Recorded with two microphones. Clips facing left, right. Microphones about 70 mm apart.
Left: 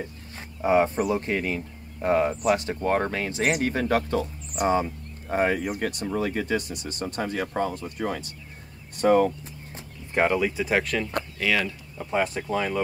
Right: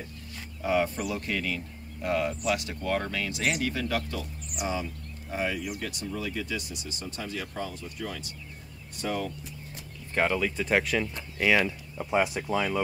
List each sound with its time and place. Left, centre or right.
0.6 s speech: left
10.1 s speech: centre
11.3 s speech: centre
12.0 s speech: centre